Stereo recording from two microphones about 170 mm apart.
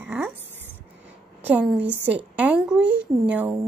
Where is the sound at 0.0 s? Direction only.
10° right (ahead or behind).